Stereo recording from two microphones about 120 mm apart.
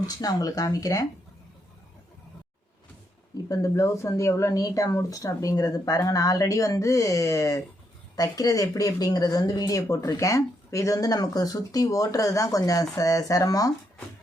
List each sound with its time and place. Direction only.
0.0 s speech: 30° left (ahead or behind)
3.5 s speech: 25° left (ahead or behind)